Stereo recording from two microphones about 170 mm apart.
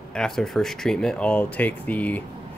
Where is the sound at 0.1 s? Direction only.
5° left (ahead or behind).